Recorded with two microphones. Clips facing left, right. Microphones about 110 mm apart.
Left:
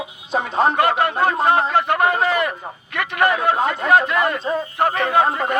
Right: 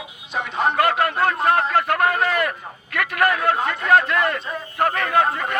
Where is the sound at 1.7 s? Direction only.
Centre (ahead or behind).